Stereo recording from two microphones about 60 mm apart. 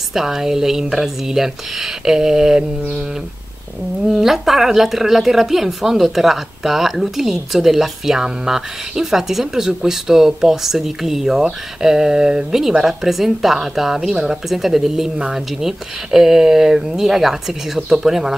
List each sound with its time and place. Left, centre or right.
0.1 s speech: centre
4.1 s speech: centre